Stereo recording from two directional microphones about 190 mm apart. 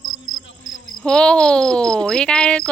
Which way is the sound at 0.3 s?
85° left.